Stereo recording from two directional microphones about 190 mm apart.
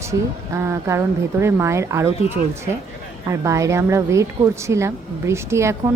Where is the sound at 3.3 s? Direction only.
15° right (ahead or behind).